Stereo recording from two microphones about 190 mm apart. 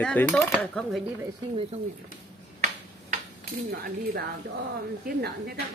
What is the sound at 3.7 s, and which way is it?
A woman's voice, 55° right (ahead or behind).